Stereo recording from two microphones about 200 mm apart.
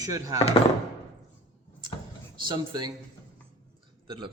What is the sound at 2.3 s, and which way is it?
Speech, 20° right (ahead or behind).